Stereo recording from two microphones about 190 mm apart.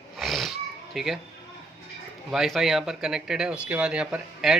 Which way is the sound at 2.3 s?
Centre (ahead or behind).